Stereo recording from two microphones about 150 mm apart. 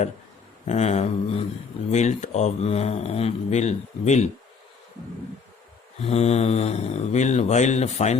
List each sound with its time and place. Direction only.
0.7 s speech: 50° left (ahead or behind)
6.0 s speech: 45° left (ahead or behind)